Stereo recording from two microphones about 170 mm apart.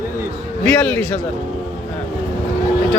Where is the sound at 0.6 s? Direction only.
5° left (ahead or behind).